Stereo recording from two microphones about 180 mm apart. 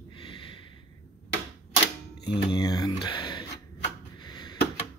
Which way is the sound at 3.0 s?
25° left (ahead or behind).